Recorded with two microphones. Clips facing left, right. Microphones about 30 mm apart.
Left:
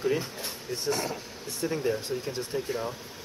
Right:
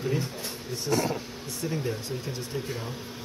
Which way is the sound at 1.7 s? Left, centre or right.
Centre.